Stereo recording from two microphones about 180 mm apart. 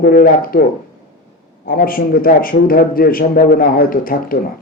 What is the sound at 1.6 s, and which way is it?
Speech, 55° left (ahead or behind).